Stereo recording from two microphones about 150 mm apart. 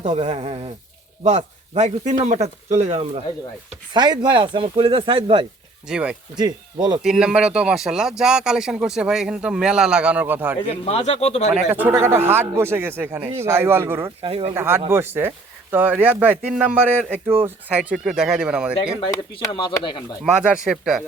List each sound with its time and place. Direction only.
0.1 s speech: 40° right (ahead or behind)
1.7 s speech: 50° right (ahead or behind)
3.9 s speech: 30° right (ahead or behind)
5.9 s a man's voice: 10° right (ahead or behind)
10.7 s speech: 40° left (ahead or behind)
11.5 s a man's voice: 15° right (ahead or behind)
14.2 s speech: 40° right (ahead or behind)
14.5 s a man's voice: 15° right (ahead or behind)
19.1 s speech: 25° left (ahead or behind)
20.5 s speech: 5° right (ahead or behind)